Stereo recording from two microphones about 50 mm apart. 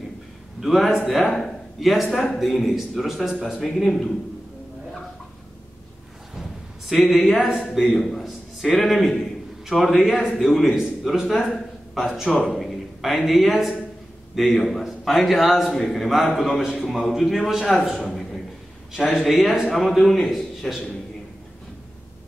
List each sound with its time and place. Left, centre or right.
0.6 s a man's voice: centre
6.9 s a man's voice: centre
11.3 s a man's voice: centre
11.9 s a man's voice: centre
18.9 s a man's voice: centre